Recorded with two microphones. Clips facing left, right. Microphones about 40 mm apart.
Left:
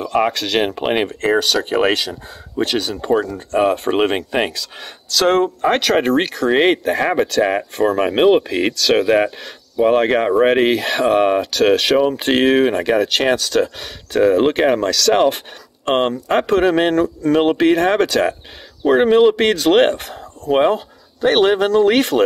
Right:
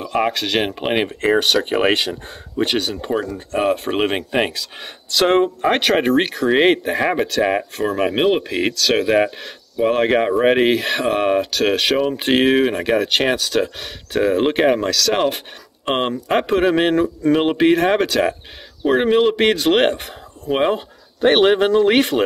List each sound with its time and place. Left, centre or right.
0.0 s speech: centre
1.4 s speech: right
2.6 s speech: centre
20.7 s speech: centre